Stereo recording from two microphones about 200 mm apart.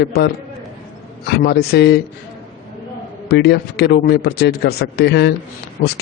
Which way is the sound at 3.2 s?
55° left (ahead or behind).